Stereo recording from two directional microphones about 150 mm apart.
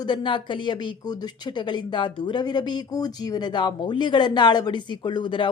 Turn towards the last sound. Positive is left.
turn(degrees=35)  # may be behind; listen again after turning